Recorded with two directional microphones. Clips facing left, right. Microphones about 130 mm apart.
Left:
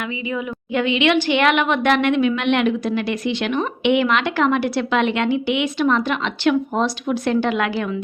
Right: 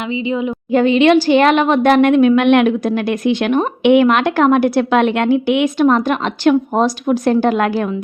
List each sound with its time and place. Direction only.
0.0 s a woman's voice: 25° right (ahead or behind)
0.7 s a woman's voice: 40° right (ahead or behind)